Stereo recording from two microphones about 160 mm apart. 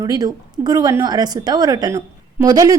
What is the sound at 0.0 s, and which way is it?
A woman's voice, 25° right (ahead or behind).